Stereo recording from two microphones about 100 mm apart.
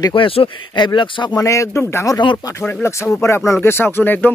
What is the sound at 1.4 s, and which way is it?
Speech, 30° left (ahead or behind).